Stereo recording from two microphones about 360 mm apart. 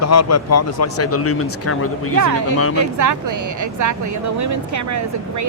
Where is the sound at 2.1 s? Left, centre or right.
Right.